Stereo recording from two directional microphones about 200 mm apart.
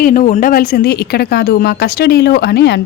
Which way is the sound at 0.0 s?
40° left (ahead or behind).